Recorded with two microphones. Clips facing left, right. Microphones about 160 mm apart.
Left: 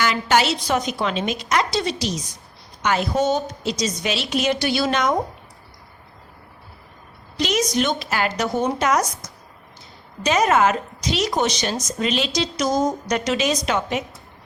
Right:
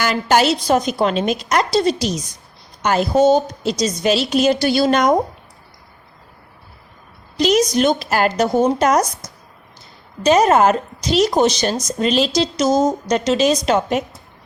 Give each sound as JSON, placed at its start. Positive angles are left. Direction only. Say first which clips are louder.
{"t": 0.0, "sound": "a woman's voice", "louder": "right 3 dB", "side_deg": -40}
{"t": 7.3, "sound": "a woman's voice", "louder": "right 6 dB", "side_deg": -35}